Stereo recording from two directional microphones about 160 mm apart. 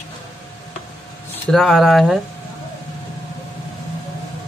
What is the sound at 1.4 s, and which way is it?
Speech, centre (ahead or behind).